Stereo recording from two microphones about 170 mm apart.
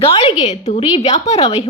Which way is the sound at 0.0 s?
35° left (ahead or behind).